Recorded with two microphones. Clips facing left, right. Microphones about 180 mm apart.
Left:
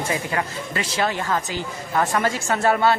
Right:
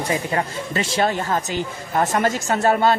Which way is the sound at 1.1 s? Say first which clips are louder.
Right 2 dB; 40° right (ahead or behind).